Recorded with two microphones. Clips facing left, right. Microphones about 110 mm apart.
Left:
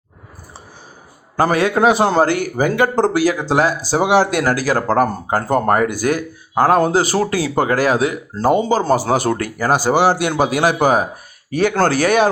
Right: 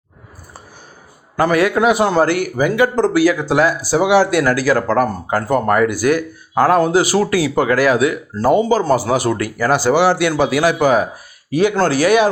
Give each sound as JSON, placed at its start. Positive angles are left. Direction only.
{"t": 1.4, "sound": "speech", "side_deg": 30}
{"t": 2.6, "sound": "speech", "side_deg": 40}
{"t": 3.9, "sound": "speech", "side_deg": 40}
{"t": 11.8, "sound": "speech", "side_deg": 55}